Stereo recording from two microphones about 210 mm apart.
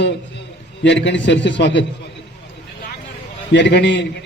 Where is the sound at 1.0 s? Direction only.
60° left (ahead or behind).